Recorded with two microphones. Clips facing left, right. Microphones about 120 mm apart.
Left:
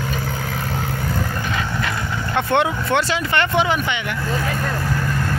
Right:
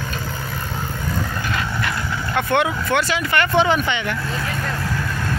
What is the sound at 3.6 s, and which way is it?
Speech, 10° left (ahead or behind).